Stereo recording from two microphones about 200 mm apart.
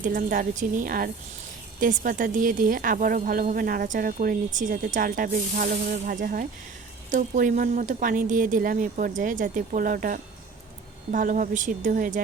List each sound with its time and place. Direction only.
0.0 s a woman's voice: 45° right (ahead or behind)